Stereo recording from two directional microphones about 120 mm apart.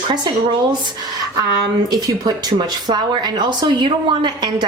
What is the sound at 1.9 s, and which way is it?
Speech, 35° right (ahead or behind).